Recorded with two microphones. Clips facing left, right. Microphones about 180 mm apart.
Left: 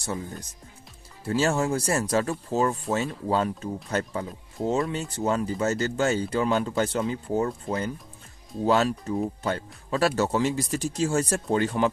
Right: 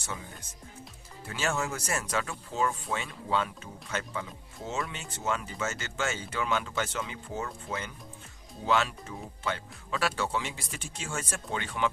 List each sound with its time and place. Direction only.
0.0 s speech: 35° left (ahead or behind)